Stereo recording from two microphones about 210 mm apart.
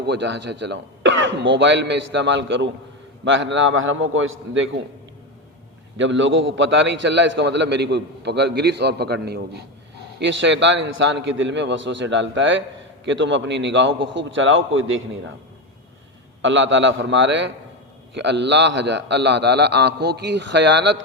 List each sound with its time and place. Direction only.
0.1 s a man's voice: 55° right (ahead or behind)
6.0 s a man's voice: 60° right (ahead or behind)
16.4 s a man's voice: 60° right (ahead or behind)